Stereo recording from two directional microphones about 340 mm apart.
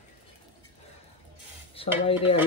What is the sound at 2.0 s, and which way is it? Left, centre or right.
Speech, centre.